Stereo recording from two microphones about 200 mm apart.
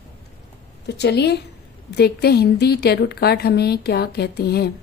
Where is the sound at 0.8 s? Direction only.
55° left (ahead or behind).